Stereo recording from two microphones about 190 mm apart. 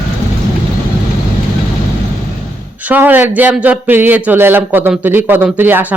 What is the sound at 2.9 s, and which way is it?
Speech, 10° right (ahead or behind).